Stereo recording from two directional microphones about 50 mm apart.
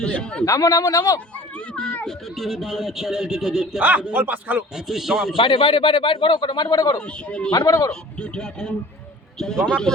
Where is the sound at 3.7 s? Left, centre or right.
Right.